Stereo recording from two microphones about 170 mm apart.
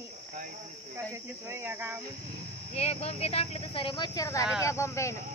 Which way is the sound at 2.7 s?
35° left (ahead or behind).